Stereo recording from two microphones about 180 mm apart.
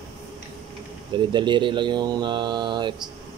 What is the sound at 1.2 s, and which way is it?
Speech, 25° right (ahead or behind).